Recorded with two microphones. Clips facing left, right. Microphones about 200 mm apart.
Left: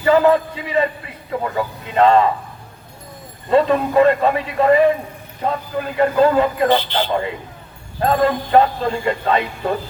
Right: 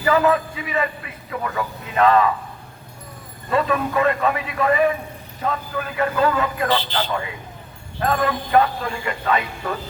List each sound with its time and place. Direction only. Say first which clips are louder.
0.0 s a man's voice: left 4 dB; 30° left (ahead or behind)
3.5 s a man's voice: left 6 dB; 30° left (ahead or behind)